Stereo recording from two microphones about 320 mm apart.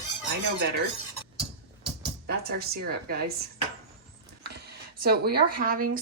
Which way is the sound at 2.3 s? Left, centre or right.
Right.